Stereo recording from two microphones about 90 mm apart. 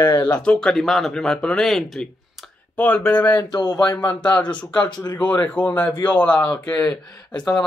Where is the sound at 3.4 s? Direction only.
45° left (ahead or behind).